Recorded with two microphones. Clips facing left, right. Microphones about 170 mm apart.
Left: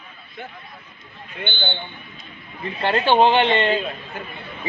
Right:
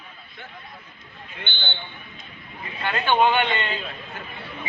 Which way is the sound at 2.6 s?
35° left (ahead or behind).